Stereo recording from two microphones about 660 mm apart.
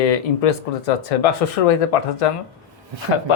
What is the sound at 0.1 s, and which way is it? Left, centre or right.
Speech, left.